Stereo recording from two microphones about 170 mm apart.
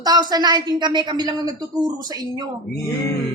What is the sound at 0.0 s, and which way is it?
A man's voice, 25° right (ahead or behind).